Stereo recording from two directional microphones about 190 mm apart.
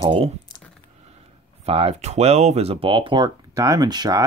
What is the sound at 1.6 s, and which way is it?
Speech, 30° right (ahead or behind).